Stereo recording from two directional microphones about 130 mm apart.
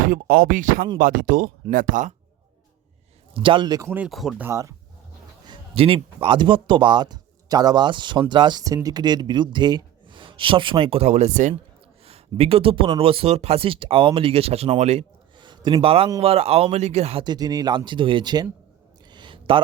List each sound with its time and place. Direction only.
0.0 s speech: 90° right
3.3 s speech: 40° right (ahead or behind)
3.8 s speech: 15° right (ahead or behind)
4.1 s speech: centre (ahead or behind)
4.4 s speech: 20° right (ahead or behind)
5.5 s speech: 45° right (ahead or behind); by 11.5 s 70° right (ahead or behind)
12.0 s speech: 50° right (ahead or behind)
15.4 s a sound: 35° right (ahead or behind)
16.2 s speech: 50° right (ahead or behind)
17.2 s speech: 30° right (ahead or behind)
19.1 s a sound: 40° right (ahead or behind)